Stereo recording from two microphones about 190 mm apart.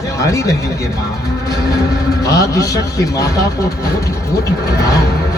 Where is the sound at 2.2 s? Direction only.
20° left (ahead or behind).